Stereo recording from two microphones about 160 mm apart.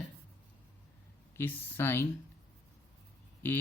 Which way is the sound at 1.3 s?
15° left (ahead or behind).